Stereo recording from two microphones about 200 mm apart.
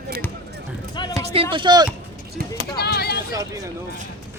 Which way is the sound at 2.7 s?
50° left (ahead or behind).